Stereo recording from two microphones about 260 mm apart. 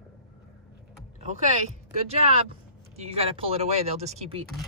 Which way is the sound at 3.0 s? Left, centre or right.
Right.